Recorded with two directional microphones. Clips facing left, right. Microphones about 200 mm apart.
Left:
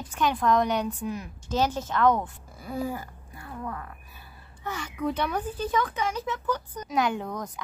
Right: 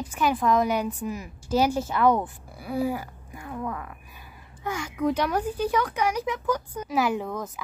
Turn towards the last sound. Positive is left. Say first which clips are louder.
# right 3 dB
turn(degrees=-5)  # may be behind; listen again after turning